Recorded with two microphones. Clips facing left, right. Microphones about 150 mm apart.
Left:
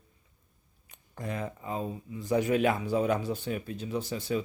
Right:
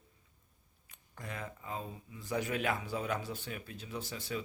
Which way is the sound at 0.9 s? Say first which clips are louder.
Left 9 dB; 25° left (ahead or behind).